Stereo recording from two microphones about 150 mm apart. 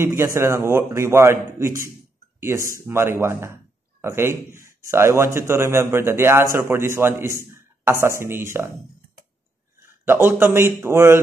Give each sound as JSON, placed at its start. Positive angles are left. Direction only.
{"t": 0.0, "sound": "a man's voice", "side_deg": -20}
{"t": 9.8, "sound": "speech", "side_deg": -15}